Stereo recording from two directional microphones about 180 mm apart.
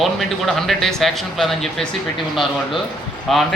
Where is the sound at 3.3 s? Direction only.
Centre (ahead or behind).